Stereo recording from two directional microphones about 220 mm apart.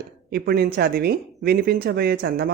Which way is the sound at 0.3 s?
45° right (ahead or behind).